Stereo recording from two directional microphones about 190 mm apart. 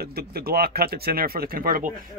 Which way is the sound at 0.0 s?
55° right (ahead or behind).